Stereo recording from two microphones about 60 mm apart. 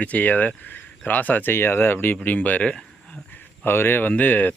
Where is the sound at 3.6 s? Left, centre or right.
Left.